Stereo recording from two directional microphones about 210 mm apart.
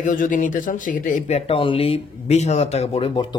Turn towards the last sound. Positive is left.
turn(degrees=20)  # may be behind; listen again after turning